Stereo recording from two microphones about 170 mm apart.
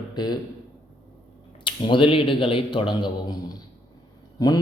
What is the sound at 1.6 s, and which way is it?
A man's voice, 30° left (ahead or behind).